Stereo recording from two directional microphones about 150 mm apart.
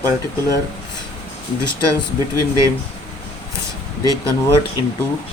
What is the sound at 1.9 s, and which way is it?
Speech, 20° right (ahead or behind).